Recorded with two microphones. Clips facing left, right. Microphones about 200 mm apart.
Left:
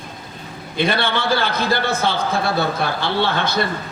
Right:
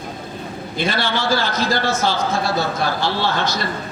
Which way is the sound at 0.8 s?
55° left (ahead or behind).